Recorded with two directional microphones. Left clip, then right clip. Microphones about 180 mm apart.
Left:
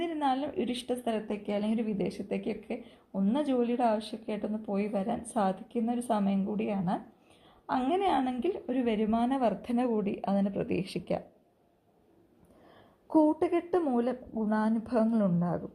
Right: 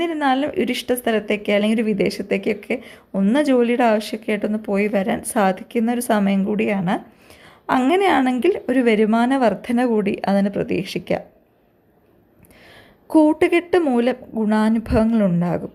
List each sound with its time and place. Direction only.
0.0 s speech: 20° right (ahead or behind)
1.3 s speech: 35° right (ahead or behind); by 11.2 s 15° right (ahead or behind)
13.1 s speech: 20° right (ahead or behind)